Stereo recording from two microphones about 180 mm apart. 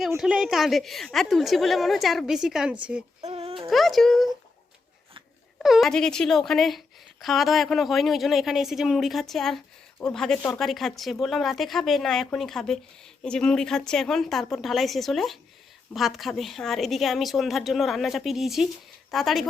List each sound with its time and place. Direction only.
0.2 s a woman's voice: 5° right (ahead or behind)
3.2 s a sound: 35° right (ahead or behind)
3.7 s a child's voice: centre (ahead or behind)
5.5 s a woman's voice: centre (ahead or behind)